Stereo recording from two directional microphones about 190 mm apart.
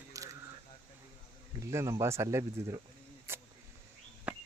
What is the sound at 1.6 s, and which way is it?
Speech, 15° right (ahead or behind).